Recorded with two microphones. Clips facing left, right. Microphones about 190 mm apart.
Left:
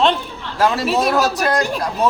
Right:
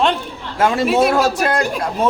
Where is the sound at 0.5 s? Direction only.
25° right (ahead or behind).